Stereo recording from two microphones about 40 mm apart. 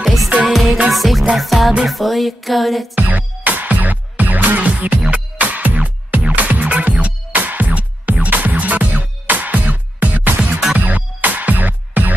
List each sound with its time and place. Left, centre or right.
0.0 s music: centre
3.0 s music: right